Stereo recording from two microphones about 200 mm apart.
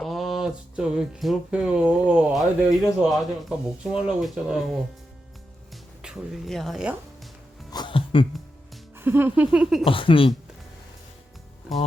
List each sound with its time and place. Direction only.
0.0 s speech: centre (ahead or behind)
7.7 s music: 20° left (ahead or behind)
9.0 s a sound: 10° right (ahead or behind)
9.8 s speech: 25° left (ahead or behind)